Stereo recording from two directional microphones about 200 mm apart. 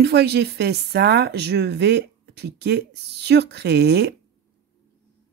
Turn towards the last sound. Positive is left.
turn(degrees=-55)  # may be behind; listen again after turning